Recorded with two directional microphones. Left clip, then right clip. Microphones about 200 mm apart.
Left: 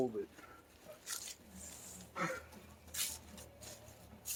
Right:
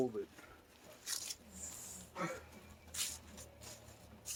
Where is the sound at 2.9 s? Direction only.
15° left (ahead or behind).